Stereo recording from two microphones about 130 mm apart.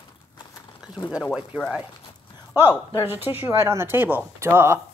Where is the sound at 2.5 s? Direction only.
15° right (ahead or behind).